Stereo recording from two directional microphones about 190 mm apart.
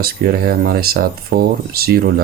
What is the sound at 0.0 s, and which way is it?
Speech, 50° right (ahead or behind).